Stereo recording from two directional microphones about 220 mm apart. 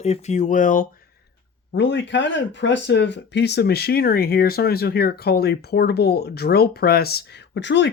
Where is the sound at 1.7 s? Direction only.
55° left (ahead or behind).